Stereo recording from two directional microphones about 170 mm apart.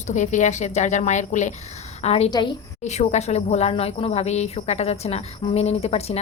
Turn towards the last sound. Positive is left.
turn(degrees=40)  # may be behind; listen again after turning